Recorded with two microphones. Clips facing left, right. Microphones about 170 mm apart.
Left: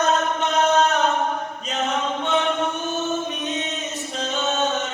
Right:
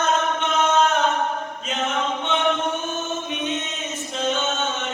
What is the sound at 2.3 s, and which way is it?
Chant, 40° left (ahead or behind).